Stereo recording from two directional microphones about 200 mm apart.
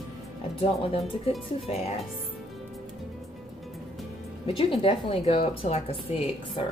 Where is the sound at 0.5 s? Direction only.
25° left (ahead or behind).